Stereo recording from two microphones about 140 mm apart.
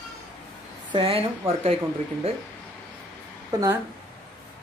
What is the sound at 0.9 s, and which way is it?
Speech, 40° right (ahead or behind).